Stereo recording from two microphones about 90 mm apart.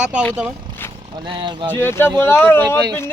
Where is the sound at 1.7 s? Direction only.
25° left (ahead or behind).